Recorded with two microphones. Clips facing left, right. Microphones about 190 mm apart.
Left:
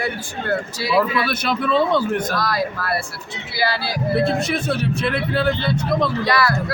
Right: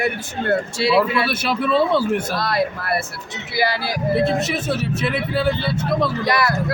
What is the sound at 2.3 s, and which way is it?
Speech, 25° right (ahead or behind).